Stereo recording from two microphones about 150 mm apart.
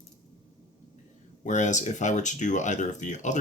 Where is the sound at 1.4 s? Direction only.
55° left (ahead or behind).